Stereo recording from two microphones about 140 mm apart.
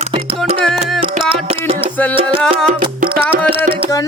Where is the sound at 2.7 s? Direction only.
90° right.